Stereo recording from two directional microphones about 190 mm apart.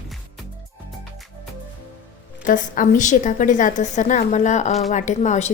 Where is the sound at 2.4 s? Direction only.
45° left (ahead or behind).